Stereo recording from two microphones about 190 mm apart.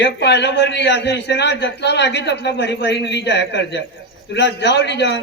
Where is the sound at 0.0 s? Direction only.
65° left (ahead or behind).